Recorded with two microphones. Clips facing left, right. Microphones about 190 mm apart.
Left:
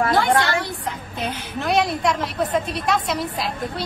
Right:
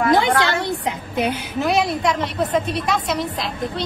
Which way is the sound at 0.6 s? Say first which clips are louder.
Right 4 dB; 20° right (ahead or behind).